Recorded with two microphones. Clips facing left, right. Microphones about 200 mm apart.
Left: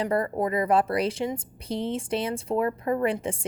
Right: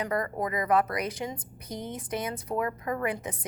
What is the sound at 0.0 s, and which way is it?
A woman's voice, 30° left (ahead or behind).